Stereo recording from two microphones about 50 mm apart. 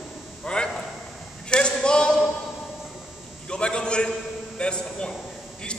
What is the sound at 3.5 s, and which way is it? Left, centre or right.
A man's voice, centre.